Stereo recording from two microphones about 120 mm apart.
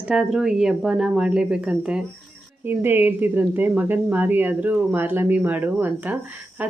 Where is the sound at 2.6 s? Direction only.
15° right (ahead or behind).